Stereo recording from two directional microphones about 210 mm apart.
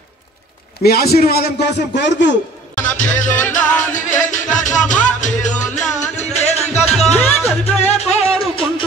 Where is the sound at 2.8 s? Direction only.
35° left (ahead or behind).